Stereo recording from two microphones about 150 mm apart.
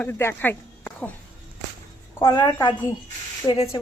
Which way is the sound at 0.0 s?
15° left (ahead or behind).